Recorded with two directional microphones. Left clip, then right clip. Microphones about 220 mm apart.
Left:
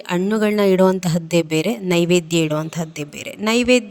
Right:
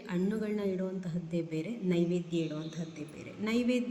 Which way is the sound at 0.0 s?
45° left (ahead or behind).